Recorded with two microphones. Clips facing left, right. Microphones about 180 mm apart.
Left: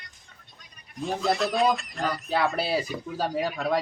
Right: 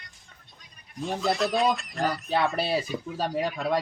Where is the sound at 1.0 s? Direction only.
Centre (ahead or behind).